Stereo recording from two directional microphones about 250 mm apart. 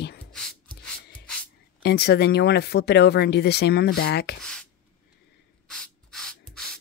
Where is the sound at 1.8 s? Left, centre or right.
Left.